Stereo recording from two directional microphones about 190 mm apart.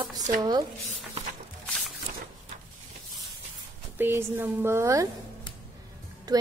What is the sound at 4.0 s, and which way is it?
A woman's voice, 10° right (ahead or behind).